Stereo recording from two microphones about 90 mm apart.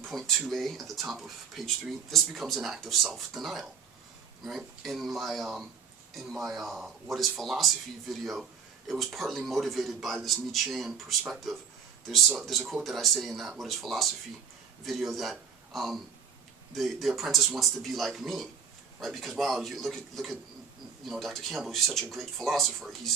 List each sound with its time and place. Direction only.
0.0 s a man's voice: 5° left (ahead or behind)